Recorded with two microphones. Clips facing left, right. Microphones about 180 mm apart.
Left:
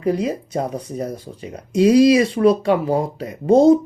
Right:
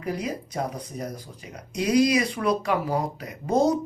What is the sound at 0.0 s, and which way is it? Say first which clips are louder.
Speech: left 9 dB; 30° left (ahead or behind).